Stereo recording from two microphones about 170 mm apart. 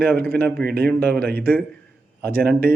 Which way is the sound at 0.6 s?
65° right (ahead or behind).